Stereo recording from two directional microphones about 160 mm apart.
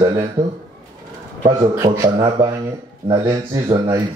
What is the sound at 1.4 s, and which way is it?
A man's voice, 25° right (ahead or behind).